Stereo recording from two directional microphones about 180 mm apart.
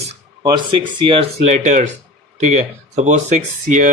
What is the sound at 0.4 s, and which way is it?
Speech, 25° right (ahead or behind).